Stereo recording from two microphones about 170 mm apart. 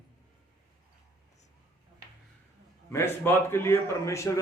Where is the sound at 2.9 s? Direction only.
15° left (ahead or behind).